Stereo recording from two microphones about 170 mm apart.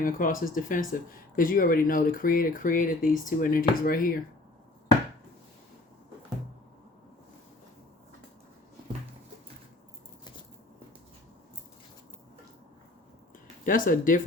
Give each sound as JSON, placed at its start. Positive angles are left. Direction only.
{"t": 0.0, "sound": "speech", "side_deg": 55}
{"t": 13.7, "sound": "speech", "side_deg": 50}